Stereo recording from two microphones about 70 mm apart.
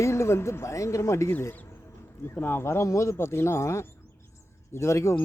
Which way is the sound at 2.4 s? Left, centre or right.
Left.